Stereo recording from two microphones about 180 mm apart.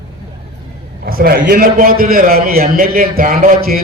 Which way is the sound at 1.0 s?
55° right (ahead or behind).